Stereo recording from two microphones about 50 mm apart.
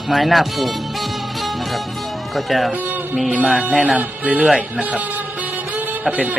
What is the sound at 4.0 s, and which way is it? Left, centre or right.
Speech, right.